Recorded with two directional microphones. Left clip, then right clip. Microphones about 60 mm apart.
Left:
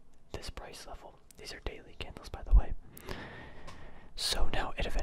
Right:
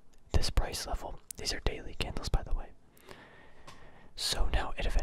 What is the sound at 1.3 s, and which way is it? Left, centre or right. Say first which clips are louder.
Speech: right 7 dB; right.